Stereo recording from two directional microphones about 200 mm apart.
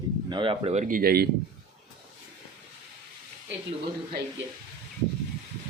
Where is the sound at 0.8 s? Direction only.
45° right (ahead or behind).